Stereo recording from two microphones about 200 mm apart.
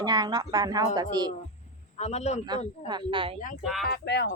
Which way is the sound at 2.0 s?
35° left (ahead or behind).